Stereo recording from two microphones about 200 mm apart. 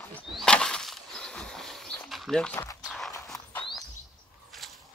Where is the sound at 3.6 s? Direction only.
20° left (ahead or behind).